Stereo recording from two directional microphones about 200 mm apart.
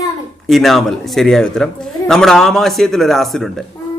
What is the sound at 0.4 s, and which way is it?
Speech, centre (ahead or behind).